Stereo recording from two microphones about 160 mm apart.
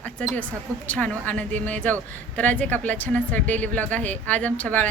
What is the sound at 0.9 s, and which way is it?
A woman's voice, 10° left (ahead or behind).